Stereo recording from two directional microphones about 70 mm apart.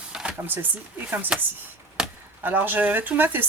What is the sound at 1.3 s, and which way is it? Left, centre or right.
Speech, centre.